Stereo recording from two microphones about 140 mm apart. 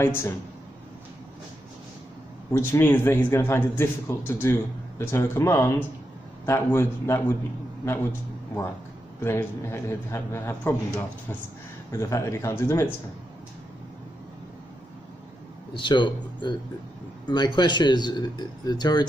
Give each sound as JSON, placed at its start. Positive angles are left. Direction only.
{"t": 0.0, "sound": "a man's voice", "side_deg": 15}
{"t": 2.5, "sound": "a man's voice", "side_deg": 15}
{"t": 9.2, "sound": "a man's voice", "side_deg": 20}
{"t": 15.7, "sound": "speech", "side_deg": 35}